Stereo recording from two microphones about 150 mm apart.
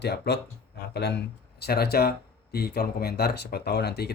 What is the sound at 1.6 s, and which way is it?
Speech, 90° left.